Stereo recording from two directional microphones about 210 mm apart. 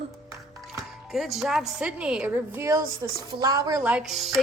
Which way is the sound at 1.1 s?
Centre (ahead or behind).